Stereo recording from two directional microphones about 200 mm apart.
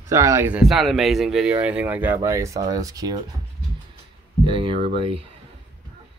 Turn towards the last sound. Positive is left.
turn(degrees=-25)  # may be behind; listen again after turning